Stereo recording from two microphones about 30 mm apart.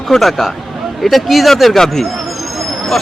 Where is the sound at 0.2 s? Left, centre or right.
Centre.